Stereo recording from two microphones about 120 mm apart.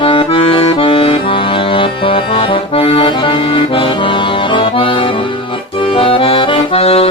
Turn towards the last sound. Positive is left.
turn(degrees=55)  # may be behind; listen again after turning